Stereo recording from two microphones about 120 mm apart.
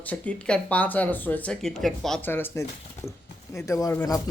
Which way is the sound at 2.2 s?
15° left (ahead or behind).